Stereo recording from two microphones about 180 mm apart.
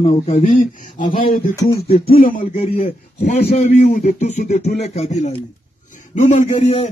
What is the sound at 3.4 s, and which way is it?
Speech, 40° left (ahead or behind).